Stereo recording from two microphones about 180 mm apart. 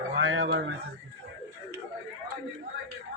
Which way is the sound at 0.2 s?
90° right.